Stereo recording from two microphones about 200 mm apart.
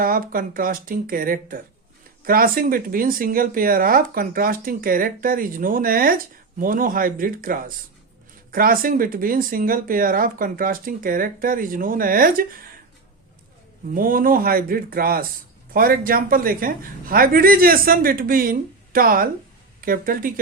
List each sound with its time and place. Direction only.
0.0 s speech: 45° right (ahead or behind)
13.9 s speech: 45° right (ahead or behind)